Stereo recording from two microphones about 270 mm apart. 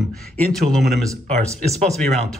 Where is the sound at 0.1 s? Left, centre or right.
Centre.